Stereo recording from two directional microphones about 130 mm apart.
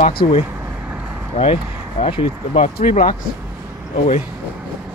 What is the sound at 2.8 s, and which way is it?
Speech, 70° left (ahead or behind).